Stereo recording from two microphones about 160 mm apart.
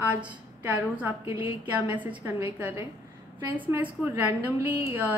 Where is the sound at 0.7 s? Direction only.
10° right (ahead or behind).